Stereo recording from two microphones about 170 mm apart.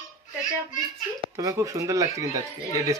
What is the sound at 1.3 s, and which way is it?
Speech, 20° right (ahead or behind).